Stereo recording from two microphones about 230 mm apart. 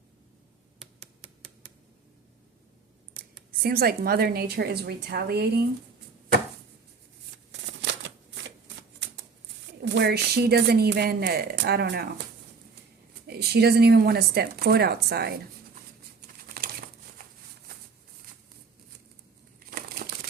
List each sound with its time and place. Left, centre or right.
3.6 s speech: right
7.8 s shuffling cards: right
9.8 s speech: right
13.2 s speech: right
19.7 s crumpling: right